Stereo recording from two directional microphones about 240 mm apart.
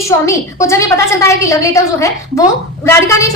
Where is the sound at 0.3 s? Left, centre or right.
Centre.